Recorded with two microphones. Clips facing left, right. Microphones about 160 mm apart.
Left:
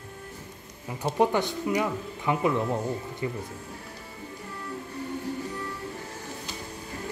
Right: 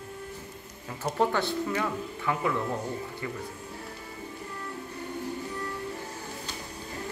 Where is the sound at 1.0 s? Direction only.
15° left (ahead or behind).